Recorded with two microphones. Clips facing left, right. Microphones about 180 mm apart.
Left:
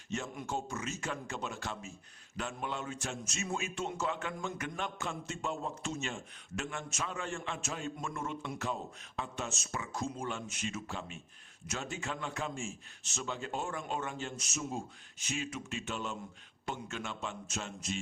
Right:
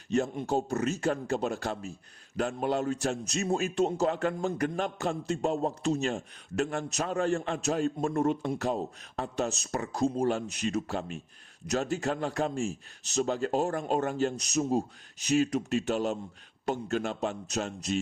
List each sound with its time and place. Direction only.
0.1 s a man's voice: 35° right (ahead or behind)
0.7 s speech: 65° right (ahead or behind)
0.9 s a man's voice: 35° right (ahead or behind)